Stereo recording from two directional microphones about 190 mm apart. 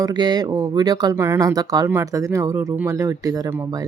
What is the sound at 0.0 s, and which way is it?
Speech, 20° right (ahead or behind).